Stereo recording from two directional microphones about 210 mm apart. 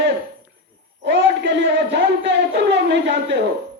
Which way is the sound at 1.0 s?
55° right (ahead or behind).